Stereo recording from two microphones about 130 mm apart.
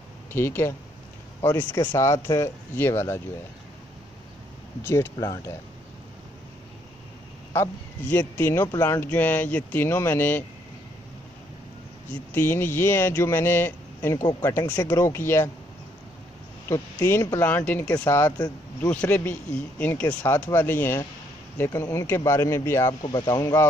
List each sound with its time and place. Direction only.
0.3 s speech: 20° left (ahead or behind)
4.8 s speech: 25° left (ahead or behind)
7.5 s speech: 15° left (ahead or behind)
12.1 s speech: 15° left (ahead or behind)
16.6 s speech: 20° left (ahead or behind)
23.0 s speech: 35° left (ahead or behind)